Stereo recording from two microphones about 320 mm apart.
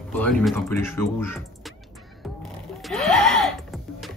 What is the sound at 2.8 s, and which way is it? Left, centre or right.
Music, centre.